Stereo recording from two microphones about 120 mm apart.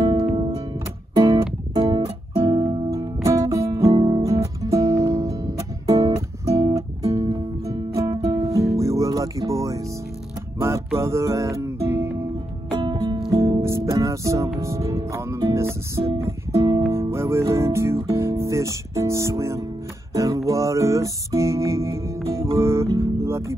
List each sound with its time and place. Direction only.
0.0 s music: 40° right (ahead or behind)
2.9 s music: 25° right (ahead or behind)
3.9 s music: 40° right (ahead or behind); by 12.3 s 20° right (ahead or behind)
12.7 s music: 35° right (ahead or behind)
15.5 s guitar: 25° right (ahead or behind)
16.2 s music: 25° right (ahead or behind)
22.6 s guitar: 25° right (ahead or behind)